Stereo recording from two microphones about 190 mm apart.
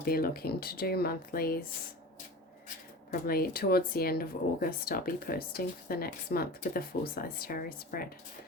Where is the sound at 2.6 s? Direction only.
50° left (ahead or behind).